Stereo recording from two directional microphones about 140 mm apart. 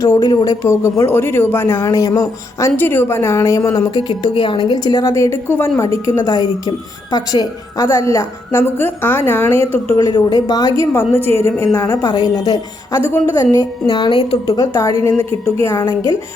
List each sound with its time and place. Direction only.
0.0 s speech: 25° left (ahead or behind)
10.0 s speech: 30° left (ahead or behind)
13.8 s speech: 35° left (ahead or behind)
14.6 s speech: 25° left (ahead or behind)